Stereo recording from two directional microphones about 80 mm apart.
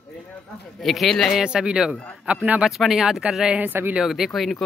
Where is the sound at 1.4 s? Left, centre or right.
Centre.